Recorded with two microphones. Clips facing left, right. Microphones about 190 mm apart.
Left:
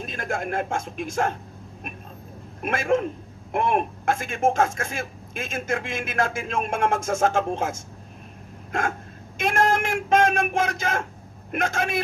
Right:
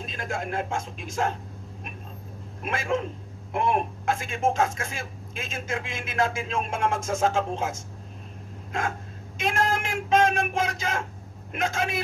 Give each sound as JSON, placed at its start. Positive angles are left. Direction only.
{"t": 0.0, "sound": "speech", "side_deg": 55}
{"t": 2.6, "sound": "speech", "side_deg": 55}
{"t": 9.4, "sound": "a sound", "side_deg": 55}
{"t": 11.5, "sound": "speech", "side_deg": 55}